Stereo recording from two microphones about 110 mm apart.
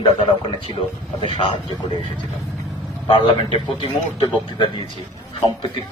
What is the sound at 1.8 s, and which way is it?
Speech, 45° left (ahead or behind).